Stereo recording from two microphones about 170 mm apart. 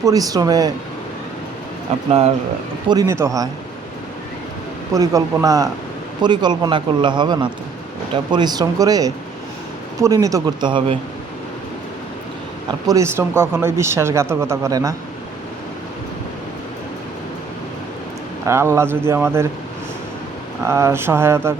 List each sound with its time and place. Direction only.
0.0 s speech: 20° right (ahead or behind)
2.9 s speech: 15° right (ahead or behind)
4.9 s speech: 20° right (ahead or behind)
12.9 s speech: 15° right (ahead or behind)
18.4 s speech: 15° right (ahead or behind)
20.7 s speech: 15° right (ahead or behind)